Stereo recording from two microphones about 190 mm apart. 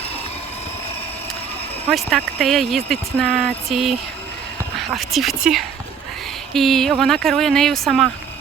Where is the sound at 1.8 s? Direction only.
5° left (ahead or behind).